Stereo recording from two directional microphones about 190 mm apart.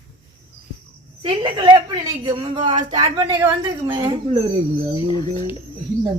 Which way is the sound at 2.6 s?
35° right (ahead or behind).